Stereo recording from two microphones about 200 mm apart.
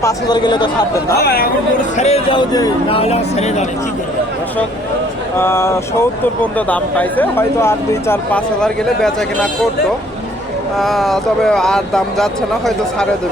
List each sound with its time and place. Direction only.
0.0 s speech: 20° left (ahead or behind)
1.1 s speech: 50° left (ahead or behind)
2.0 s speech: 30° left (ahead or behind)
3.0 s speech: 35° left (ahead or behind)
5.4 s speech: 10° left (ahead or behind)
10.8 s speech: centre (ahead or behind)